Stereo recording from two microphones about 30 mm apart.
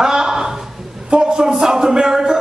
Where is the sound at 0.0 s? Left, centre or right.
Right.